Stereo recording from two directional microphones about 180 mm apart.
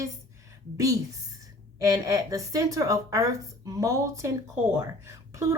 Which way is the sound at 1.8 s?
20° right (ahead or behind).